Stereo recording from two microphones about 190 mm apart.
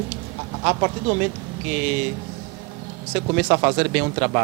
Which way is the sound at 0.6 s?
25° right (ahead or behind).